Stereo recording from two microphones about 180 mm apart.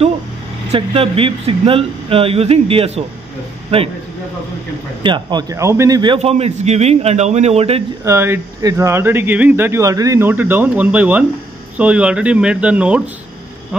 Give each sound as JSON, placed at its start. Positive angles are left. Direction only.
{"t": 0.7, "sound": "speech", "side_deg": -30}
{"t": 5.0, "sound": "a man's voice", "side_deg": -25}
{"t": 6.1, "sound": "speech", "side_deg": -35}
{"t": 8.0, "sound": "speech", "side_deg": -15}